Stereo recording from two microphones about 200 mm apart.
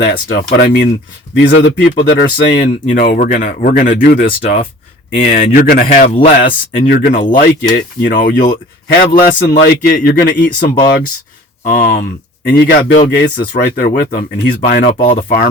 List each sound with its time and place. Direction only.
0.0 s speech: 50° left (ahead or behind)
1.5 s speech: 60° left (ahead or behind); by 14.9 s 45° left (ahead or behind)